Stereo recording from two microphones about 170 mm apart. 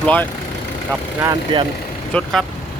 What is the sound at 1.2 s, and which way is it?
Speech, 25° right (ahead or behind).